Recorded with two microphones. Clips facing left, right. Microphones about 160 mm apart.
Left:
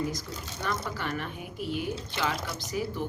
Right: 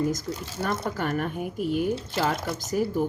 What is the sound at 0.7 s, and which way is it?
Speech, 45° right (ahead or behind).